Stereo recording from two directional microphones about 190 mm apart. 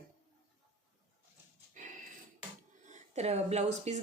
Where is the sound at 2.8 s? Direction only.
40° right (ahead or behind).